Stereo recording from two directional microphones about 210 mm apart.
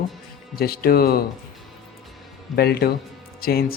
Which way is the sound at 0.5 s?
45° left (ahead or behind).